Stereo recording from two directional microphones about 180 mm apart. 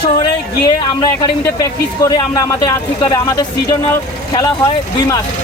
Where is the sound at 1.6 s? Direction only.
20° left (ahead or behind).